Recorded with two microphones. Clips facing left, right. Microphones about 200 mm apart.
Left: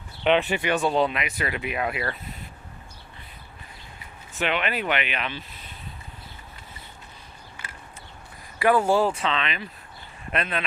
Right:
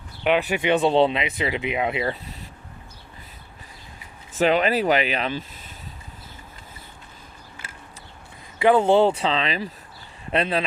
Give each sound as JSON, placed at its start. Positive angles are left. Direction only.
{"t": 0.3, "sound": "speech", "side_deg": -10}
{"t": 0.6, "sound": "speech", "side_deg": -20}
{"t": 4.4, "sound": "speech", "side_deg": -35}
{"t": 8.6, "sound": "speech", "side_deg": -20}